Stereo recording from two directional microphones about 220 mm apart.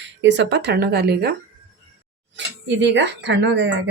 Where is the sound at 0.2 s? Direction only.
55° right (ahead or behind).